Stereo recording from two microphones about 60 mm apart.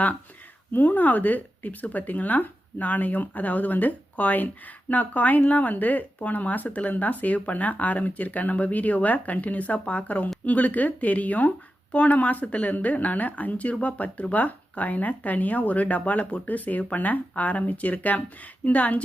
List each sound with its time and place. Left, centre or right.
0.7 s speech: left